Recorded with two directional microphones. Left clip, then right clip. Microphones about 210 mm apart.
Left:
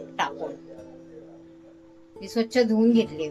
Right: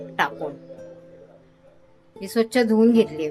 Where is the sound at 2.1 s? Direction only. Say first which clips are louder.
Right 2 dB; 25° right (ahead or behind).